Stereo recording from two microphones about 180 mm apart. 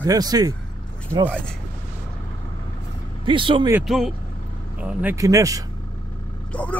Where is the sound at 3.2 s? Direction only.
25° right (ahead or behind).